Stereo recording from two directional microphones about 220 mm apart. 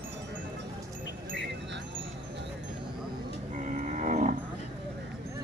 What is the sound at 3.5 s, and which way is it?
Cattle, 35° right (ahead or behind).